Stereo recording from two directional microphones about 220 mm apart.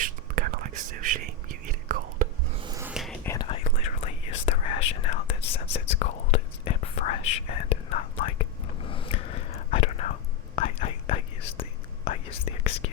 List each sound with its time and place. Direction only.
0.0 s whispering: 40° right (ahead or behind)
2.6 s a sound: 20° right (ahead or behind)
2.8 s whispering: centre (ahead or behind)
3.2 s whispering: 20° left (ahead or behind)